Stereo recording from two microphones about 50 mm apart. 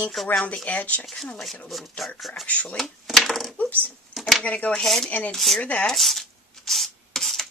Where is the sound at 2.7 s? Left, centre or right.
Centre.